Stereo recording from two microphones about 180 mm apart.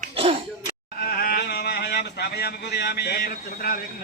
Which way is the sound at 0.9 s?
55° left (ahead or behind).